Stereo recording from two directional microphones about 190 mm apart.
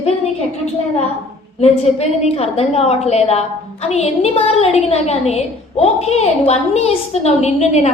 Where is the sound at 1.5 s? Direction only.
35° left (ahead or behind).